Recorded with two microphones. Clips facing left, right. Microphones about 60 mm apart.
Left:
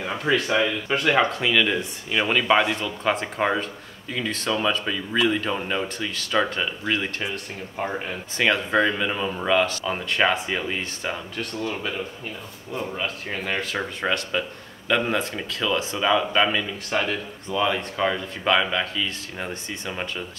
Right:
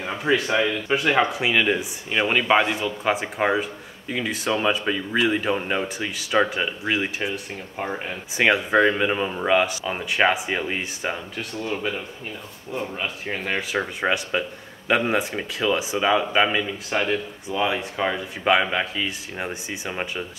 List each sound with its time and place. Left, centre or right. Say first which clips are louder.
0.2 s speech: right 1 dB; centre
1.4 s speech: right 1 dB; centre
7.7 s speech: left 1 dB; centre
8.4 s speech: right 3 dB; centre
12.9 s speech: even; centre